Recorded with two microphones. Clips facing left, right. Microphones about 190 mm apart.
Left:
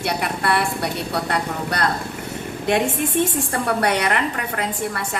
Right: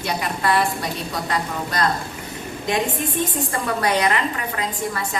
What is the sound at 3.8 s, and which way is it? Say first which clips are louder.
A woman's voice: right 2 dB; 65° left (ahead or behind).